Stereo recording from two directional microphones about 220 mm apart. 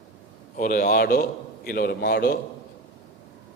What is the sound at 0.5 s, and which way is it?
A man's voice, 40° left (ahead or behind).